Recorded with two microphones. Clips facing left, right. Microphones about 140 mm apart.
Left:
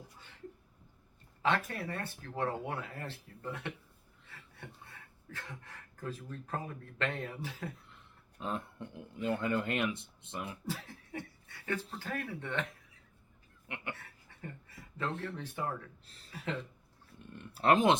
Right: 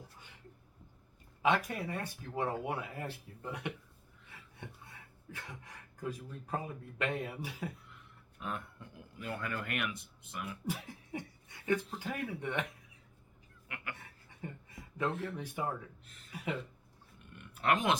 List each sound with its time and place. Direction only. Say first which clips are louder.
1.4 s speech: right 1 dB; 15° right (ahead or behind)
8.4 s speech: left 3 dB; 30° left (ahead or behind)
10.7 s speech: right 1 dB; 15° right (ahead or behind)
13.7 s speech: left 3 dB; 25° left (ahead or behind)
13.9 s a sound: left 1 dB; 15° right (ahead or behind)
15.4 s speech: even; 15° right (ahead or behind)
16.0 s a sound: even; 35° left (ahead or behind)
16.3 s speech: even; 10° right (ahead or behind)
17.2 s speech: left 5 dB; 30° left (ahead or behind)